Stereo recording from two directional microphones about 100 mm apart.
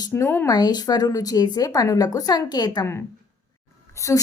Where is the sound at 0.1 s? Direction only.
25° left (ahead or behind).